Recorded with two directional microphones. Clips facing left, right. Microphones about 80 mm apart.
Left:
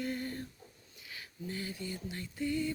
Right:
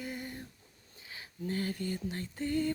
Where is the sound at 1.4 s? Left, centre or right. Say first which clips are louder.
Right 6 dB; right.